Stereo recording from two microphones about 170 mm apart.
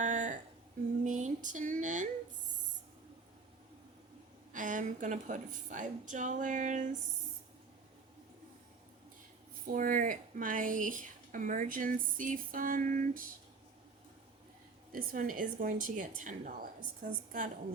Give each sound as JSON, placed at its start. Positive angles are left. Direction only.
{"t": 0.0, "sound": "a sound", "side_deg": -45}
{"t": 4.5, "sound": "a woman's voice", "side_deg": -50}
{"t": 9.7, "sound": "a woman's voice", "side_deg": -55}
{"t": 14.9, "sound": "a woman's voice", "side_deg": -55}